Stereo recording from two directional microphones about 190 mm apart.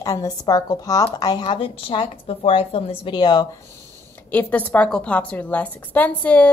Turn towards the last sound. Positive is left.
turn(degrees=10)  # may be behind; listen again after turning